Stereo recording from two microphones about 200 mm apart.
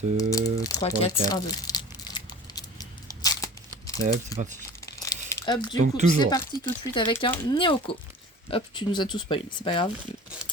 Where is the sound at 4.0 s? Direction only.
50° right (ahead or behind).